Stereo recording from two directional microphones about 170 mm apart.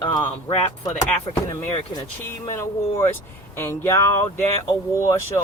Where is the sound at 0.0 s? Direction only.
25° left (ahead or behind).